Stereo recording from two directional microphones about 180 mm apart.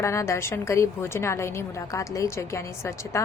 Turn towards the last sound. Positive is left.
turn(degrees=15)  # may be behind; listen again after turning